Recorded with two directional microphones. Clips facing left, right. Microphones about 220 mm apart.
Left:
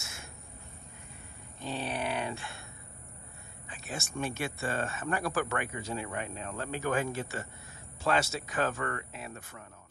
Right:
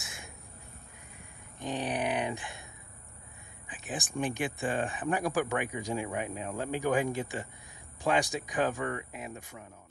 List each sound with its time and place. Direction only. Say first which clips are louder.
0.0 s a sound: right 1 dB; 15° right (ahead or behind)
1.6 s speech: right 3 dB; 15° right (ahead or behind)
3.6 s speech: right 2 dB; 15° right (ahead or behind)